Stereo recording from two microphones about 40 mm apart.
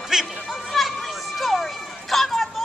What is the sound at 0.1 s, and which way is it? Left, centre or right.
Music, centre.